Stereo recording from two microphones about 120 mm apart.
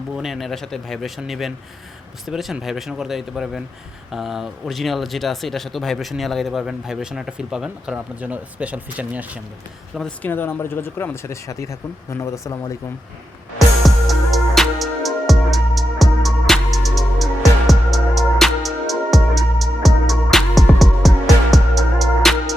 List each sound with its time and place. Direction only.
0.2 s speech: centre (ahead or behind)
10.2 s speech: 15° left (ahead or behind)
13.6 s music: centre (ahead or behind)